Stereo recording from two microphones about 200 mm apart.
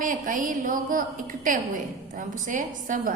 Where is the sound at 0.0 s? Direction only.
40° right (ahead or behind).